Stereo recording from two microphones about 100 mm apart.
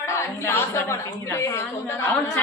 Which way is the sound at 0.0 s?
30° left (ahead or behind).